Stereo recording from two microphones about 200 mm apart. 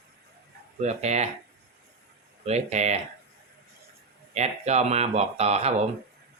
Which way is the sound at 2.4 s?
35° right (ahead or behind).